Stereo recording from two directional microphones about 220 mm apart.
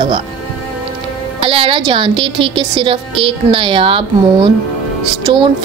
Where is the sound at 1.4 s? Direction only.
25° right (ahead or behind).